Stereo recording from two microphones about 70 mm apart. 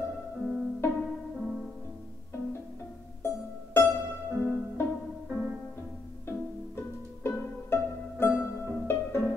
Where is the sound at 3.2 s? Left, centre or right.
Left.